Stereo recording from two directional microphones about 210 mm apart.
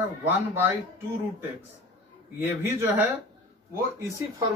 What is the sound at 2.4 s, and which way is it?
Speech, 10° right (ahead or behind).